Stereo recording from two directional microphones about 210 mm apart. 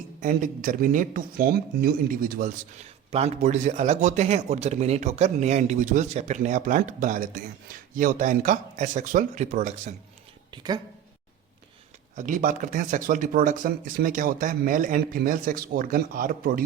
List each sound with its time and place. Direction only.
0.2 s speech: 40° right (ahead or behind)
10.5 s a woman's voice: 20° right (ahead or behind)
12.1 s speech: 40° right (ahead or behind)